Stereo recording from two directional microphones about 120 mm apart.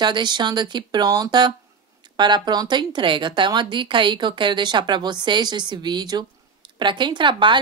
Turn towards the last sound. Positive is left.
turn(degrees=-40)  # may be behind; listen again after turning